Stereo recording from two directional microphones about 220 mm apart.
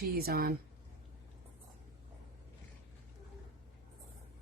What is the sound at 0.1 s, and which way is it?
Speech, 45° right (ahead or behind).